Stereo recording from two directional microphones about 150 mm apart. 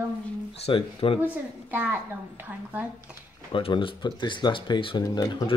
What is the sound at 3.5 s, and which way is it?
Speech, 35° left (ahead or behind).